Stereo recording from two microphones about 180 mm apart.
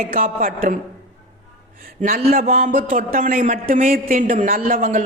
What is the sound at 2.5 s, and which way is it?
Speech, 50° right (ahead or behind).